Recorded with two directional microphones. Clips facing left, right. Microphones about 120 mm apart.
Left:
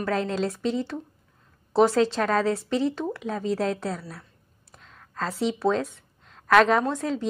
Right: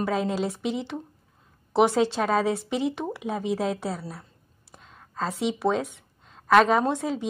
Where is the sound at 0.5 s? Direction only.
20° right (ahead or behind).